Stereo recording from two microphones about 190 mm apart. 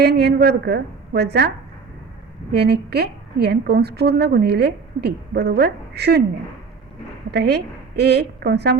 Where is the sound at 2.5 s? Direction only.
60° right (ahead or behind).